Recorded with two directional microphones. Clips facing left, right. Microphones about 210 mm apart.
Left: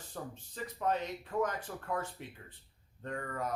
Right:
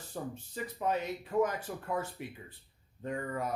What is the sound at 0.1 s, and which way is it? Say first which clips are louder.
Speech: right 5 dB; 10° right (ahead or behind).